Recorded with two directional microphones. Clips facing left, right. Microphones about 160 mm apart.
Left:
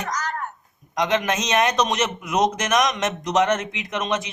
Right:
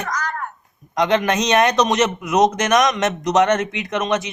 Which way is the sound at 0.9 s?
60° right (ahead or behind).